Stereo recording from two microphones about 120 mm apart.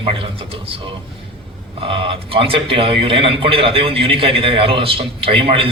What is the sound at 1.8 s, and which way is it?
A man's voice, 50° right (ahead or behind).